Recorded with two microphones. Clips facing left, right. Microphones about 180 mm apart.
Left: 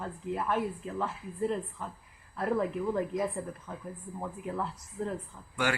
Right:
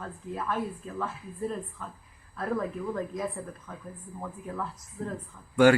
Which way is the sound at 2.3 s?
20° left (ahead or behind).